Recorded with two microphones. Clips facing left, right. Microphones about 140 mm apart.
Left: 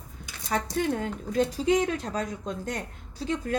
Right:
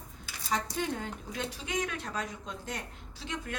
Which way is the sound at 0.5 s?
50° left (ahead or behind).